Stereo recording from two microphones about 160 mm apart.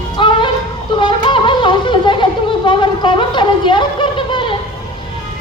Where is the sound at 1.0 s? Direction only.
30° left (ahead or behind).